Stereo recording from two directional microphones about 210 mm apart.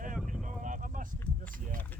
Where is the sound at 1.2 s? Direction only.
10° left (ahead or behind).